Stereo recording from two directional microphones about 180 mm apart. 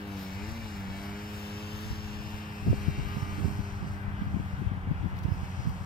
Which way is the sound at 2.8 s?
45° left (ahead or behind).